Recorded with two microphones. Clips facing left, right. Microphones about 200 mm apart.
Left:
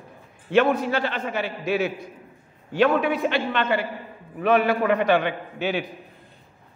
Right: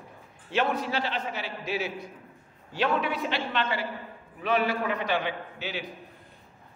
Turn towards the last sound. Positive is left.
turn(degrees=55)  # may be behind; listen again after turning